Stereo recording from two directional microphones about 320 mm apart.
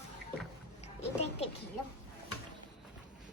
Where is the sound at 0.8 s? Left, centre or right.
Centre.